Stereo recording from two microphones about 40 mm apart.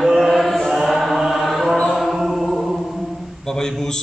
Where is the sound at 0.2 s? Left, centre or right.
Centre.